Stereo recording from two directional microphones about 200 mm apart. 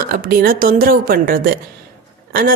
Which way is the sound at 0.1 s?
45° right (ahead or behind).